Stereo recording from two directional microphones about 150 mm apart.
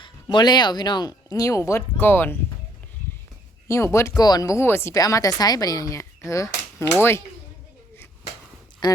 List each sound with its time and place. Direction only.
0.0 s speech: 30° left (ahead or behind); by 2.4 s 15° left (ahead or behind)
3.7 s speech: 20° left (ahead or behind)
8.8 s speech: 25° left (ahead or behind)